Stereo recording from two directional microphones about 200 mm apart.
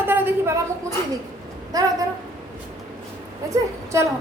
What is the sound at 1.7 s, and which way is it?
Speech, 15° right (ahead or behind).